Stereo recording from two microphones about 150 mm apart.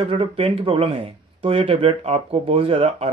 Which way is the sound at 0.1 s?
35° right (ahead or behind).